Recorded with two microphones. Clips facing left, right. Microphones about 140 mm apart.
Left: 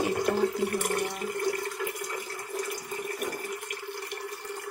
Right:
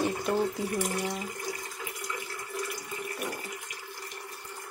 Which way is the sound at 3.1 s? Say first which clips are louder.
Left 3 dB; 55° left (ahead or behind).